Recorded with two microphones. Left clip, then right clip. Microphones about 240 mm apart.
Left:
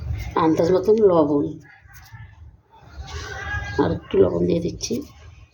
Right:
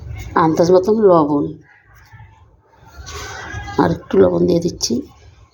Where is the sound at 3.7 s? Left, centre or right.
Right.